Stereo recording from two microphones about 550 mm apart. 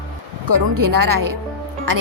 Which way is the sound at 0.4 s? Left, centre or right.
Right.